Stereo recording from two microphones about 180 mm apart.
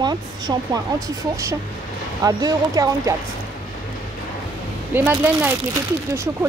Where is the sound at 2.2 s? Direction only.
20° right (ahead or behind).